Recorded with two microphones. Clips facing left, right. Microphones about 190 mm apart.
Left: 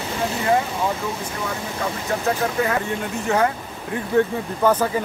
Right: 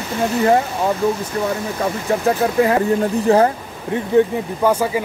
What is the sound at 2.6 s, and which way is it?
Speech, 35° right (ahead or behind).